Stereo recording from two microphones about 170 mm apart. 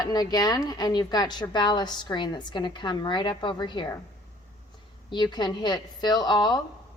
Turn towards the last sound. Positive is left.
turn(degrees=25)  # may be behind; listen again after turning